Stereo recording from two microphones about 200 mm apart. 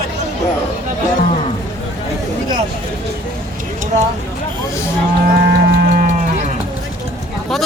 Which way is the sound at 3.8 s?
35° right (ahead or behind).